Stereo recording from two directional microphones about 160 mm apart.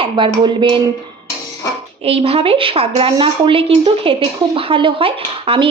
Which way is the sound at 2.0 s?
40° right (ahead or behind).